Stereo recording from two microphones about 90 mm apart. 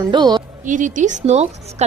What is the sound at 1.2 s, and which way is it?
Speech, 90° right.